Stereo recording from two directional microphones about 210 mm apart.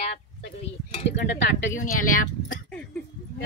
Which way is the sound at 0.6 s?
30° left (ahead or behind).